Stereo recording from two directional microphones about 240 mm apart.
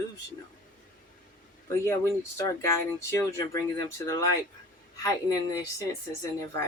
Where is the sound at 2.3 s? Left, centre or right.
Centre.